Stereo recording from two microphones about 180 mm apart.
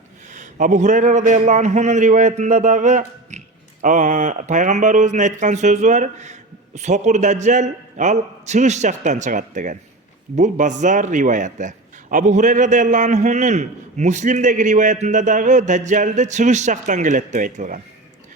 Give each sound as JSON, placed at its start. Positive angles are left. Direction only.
{"t": 0.3, "sound": "a man's voice", "side_deg": -45}